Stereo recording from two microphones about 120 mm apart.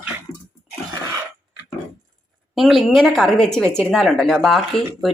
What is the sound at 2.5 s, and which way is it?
Speech, centre (ahead or behind).